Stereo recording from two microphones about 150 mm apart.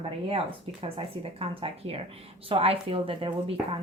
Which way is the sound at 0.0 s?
40° right (ahead or behind).